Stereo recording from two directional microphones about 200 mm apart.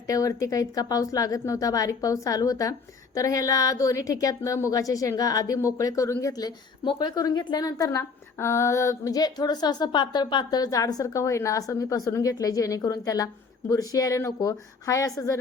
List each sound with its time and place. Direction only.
0.1 s a woman's voice: 15° left (ahead or behind)